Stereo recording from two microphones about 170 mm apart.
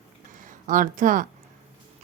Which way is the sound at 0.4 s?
50° right (ahead or behind).